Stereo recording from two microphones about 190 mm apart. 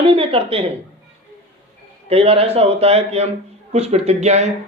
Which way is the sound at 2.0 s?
30° right (ahead or behind).